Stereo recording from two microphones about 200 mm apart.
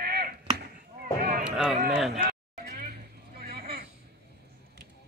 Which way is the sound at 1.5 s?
5° right (ahead or behind).